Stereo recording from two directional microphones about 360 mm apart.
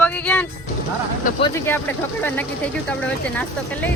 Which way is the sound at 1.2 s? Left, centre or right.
Left.